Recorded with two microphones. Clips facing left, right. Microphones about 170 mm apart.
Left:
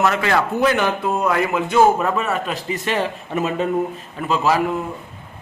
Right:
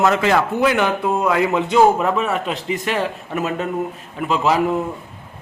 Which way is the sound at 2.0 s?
5° right (ahead or behind).